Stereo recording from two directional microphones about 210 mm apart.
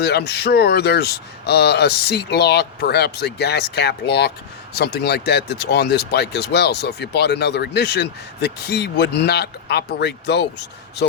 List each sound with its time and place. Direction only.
0.0 s speech: 50° left (ahead or behind)